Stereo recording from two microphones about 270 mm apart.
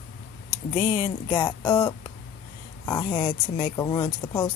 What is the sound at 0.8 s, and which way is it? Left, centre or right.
Speech, centre.